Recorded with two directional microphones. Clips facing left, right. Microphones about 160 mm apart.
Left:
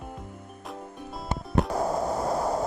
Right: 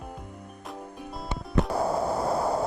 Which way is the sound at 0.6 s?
Centre (ahead or behind).